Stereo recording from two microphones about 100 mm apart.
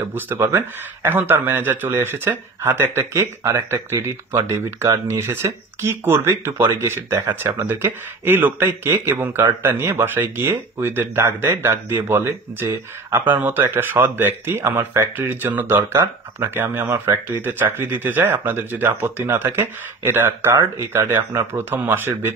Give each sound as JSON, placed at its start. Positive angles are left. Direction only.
{"t": 0.0, "sound": "a man's voice", "side_deg": -25}
{"t": 21.6, "sound": "speech", "side_deg": -20}